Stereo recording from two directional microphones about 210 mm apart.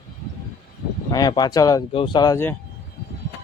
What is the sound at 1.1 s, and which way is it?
Speech, 20° left (ahead or behind).